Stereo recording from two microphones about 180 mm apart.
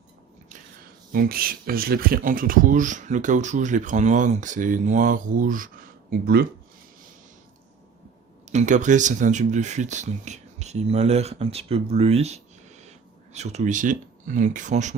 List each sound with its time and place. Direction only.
1.1 s speech: 55° right (ahead or behind)
8.4 s speech: 40° right (ahead or behind)